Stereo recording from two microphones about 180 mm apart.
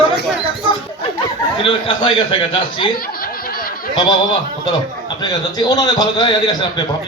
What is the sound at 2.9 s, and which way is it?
Snicker, 55° left (ahead or behind).